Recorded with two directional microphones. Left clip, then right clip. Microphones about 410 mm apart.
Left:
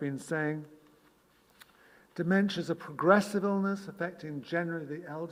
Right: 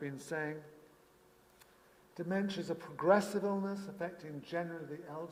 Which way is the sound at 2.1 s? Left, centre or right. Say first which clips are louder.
Left 8 dB; left.